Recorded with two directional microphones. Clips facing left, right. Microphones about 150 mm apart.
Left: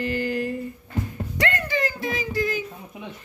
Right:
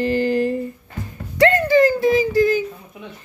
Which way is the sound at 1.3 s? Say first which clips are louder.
Right 12 dB; 35° right (ahead or behind).